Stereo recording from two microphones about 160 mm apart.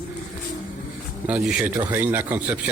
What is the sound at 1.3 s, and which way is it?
Speech, 5° right (ahead or behind).